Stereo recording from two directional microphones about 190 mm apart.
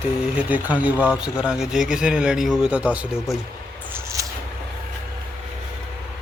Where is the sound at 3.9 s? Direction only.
15° right (ahead or behind).